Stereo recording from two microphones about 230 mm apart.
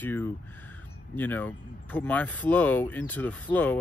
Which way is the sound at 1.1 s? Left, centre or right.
Centre.